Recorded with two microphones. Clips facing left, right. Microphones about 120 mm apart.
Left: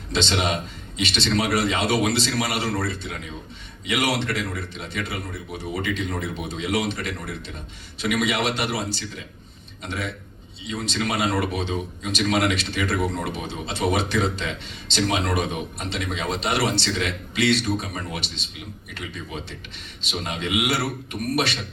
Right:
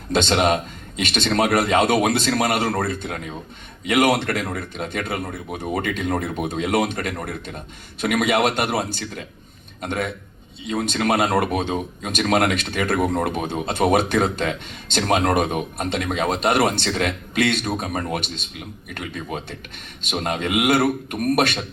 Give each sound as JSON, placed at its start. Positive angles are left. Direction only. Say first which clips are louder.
{"t": 0.1, "sound": "speech", "louder": "right 6 dB", "side_deg": -50}